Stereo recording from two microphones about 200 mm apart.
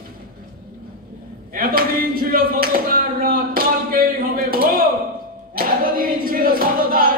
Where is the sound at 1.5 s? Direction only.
45° right (ahead or behind).